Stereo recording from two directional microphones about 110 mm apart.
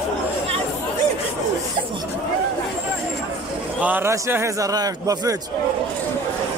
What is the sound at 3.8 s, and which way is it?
A man's voice, 15° right (ahead or behind).